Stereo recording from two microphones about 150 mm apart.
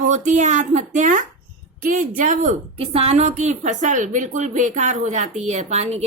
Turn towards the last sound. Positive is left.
turn(degrees=-45)  # may be behind; listen again after turning